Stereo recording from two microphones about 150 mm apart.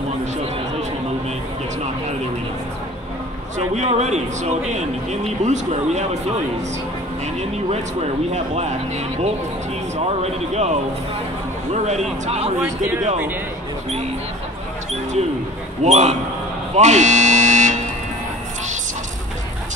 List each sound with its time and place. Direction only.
3.5 s a man's voice: 50° right (ahead or behind)
8.3 s a man's voice: 45° right (ahead or behind)
11.7 s a man's voice: 50° right (ahead or behind)
12.6 s speech: 20° right (ahead or behind)
15.8 s a man's voice: 45° right (ahead or behind)